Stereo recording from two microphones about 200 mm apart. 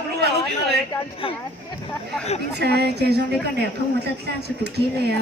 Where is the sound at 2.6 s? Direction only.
55° right (ahead or behind).